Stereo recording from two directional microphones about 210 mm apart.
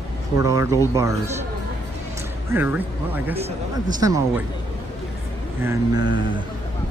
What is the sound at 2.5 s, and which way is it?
Speech, 10° right (ahead or behind).